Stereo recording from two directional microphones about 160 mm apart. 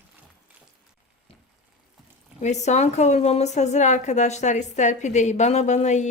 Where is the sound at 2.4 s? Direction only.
45° left (ahead or behind).